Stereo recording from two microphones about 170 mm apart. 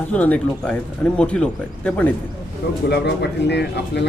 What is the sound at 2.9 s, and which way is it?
A man's voice, 85° left.